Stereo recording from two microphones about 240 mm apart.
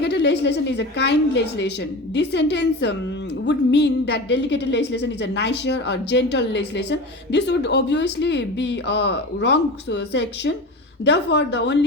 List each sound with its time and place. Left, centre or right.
0.0 s a woman's voice: left